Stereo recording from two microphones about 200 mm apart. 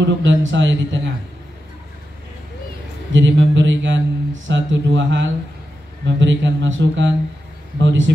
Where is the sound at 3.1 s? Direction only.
65° right (ahead or behind).